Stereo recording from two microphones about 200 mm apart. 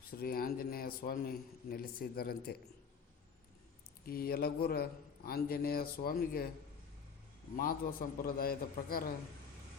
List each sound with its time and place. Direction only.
0.2 s a man's voice: 45° left (ahead or behind)
4.0 s a man's voice: 50° left (ahead or behind)
7.5 s a man's voice: 45° left (ahead or behind)